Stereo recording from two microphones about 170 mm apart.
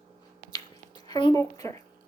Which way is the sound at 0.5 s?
25° left (ahead or behind).